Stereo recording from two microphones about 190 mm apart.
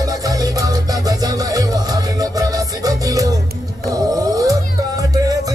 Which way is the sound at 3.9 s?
20° right (ahead or behind).